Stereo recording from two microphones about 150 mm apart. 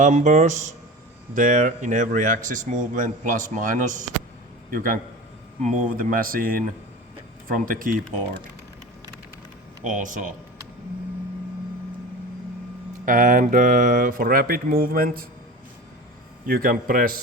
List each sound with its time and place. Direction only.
0.0 s speech: 50° right (ahead or behind)
4.7 s speech: 70° right (ahead or behind)
9.8 s speech: 60° right (ahead or behind)
13.1 s speech: 60° right (ahead or behind)
16.5 s speech: 70° right (ahead or behind)